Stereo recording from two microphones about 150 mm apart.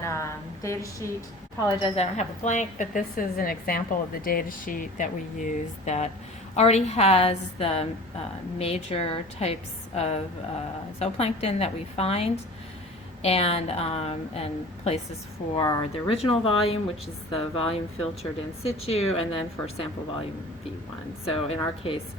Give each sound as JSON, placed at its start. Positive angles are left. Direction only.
{"t": 0.0, "sound": "a sound", "side_deg": 20}
{"t": 2.0, "sound": "a woman's voice", "side_deg": 50}
{"t": 21.2, "sound": "speech", "side_deg": 40}